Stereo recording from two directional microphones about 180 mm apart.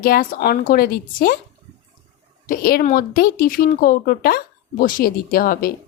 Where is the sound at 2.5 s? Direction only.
55° left (ahead or behind).